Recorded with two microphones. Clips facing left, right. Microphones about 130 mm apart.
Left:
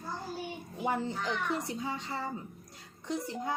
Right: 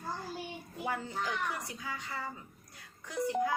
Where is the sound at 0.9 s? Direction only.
25° left (ahead or behind).